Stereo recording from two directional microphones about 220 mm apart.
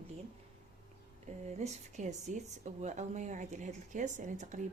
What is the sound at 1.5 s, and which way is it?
Speech, 30° right (ahead or behind).